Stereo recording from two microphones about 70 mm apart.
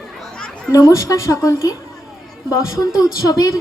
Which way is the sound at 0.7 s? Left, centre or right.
Left.